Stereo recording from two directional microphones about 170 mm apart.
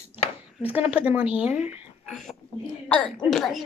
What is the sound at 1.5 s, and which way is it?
Speech, 40° left (ahead or behind).